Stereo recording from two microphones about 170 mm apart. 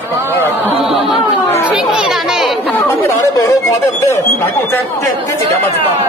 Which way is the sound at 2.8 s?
15° left (ahead or behind).